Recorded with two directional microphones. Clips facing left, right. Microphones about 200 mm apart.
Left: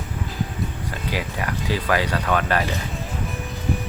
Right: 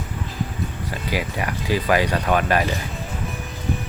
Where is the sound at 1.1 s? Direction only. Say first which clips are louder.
Right 2 dB; 10° right (ahead or behind).